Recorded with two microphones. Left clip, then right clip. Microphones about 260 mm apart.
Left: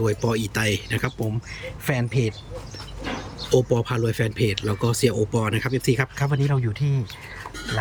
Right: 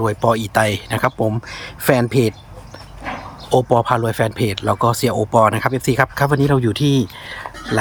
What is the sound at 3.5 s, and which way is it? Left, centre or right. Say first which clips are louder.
Speech: right 7 dB; centre.